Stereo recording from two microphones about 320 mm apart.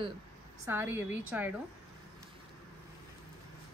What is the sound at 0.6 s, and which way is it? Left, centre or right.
Speech, centre.